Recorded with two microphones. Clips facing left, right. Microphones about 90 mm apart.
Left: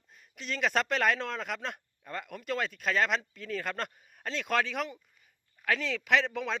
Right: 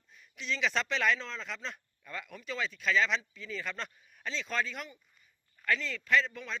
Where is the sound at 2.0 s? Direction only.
45° left (ahead or behind); by 6.6 s 80° left.